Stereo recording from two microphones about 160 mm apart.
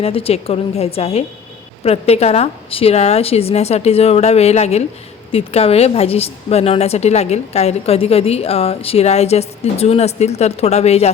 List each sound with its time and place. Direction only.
0.0 s a woman's voice: 35° left (ahead or behind)